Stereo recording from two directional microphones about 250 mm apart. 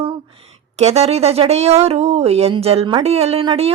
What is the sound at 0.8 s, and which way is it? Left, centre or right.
Speech, right.